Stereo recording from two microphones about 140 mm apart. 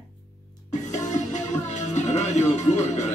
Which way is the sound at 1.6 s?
55° left (ahead or behind).